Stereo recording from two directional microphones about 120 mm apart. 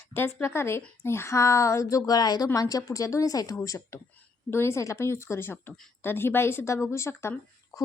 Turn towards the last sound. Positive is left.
turn(degrees=20)  # may be behind; listen again after turning